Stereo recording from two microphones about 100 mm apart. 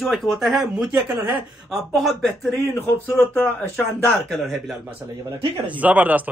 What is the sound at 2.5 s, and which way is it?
Speech, 25° left (ahead or behind).